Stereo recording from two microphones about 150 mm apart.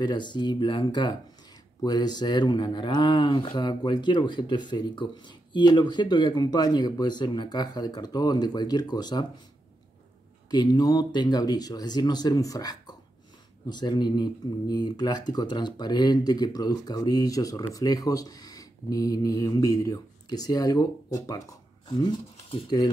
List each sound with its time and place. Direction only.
0.0 s speech: 30° left (ahead or behind)
10.5 s speech: 30° left (ahead or behind)